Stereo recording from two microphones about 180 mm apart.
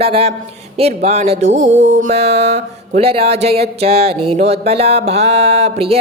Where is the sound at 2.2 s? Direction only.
65° right (ahead or behind).